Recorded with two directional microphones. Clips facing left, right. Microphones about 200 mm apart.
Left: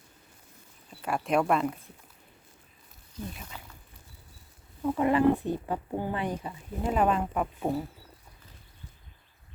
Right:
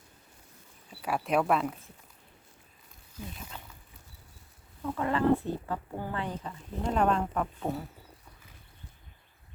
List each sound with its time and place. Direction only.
0.9 s speech: 5° right (ahead or behind)
3.5 s a sound: 5° left (ahead or behind)
4.8 s speech: 20° left (ahead or behind)